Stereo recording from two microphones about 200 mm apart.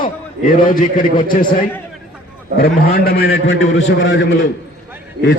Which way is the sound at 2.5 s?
50° left (ahead or behind).